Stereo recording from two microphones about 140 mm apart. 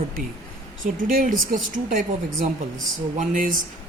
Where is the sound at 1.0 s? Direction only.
80° right.